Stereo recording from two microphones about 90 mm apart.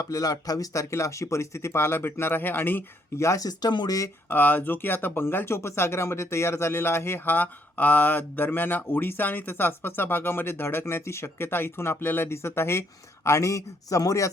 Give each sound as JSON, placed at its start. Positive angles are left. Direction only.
{"t": 0.0, "sound": "speech", "side_deg": 40}
{"t": 3.2, "sound": "speech", "side_deg": 40}
{"t": 4.3, "sound": "speech", "side_deg": 20}